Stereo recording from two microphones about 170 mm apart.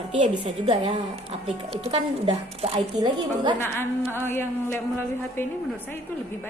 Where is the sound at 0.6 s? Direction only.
30° right (ahead or behind).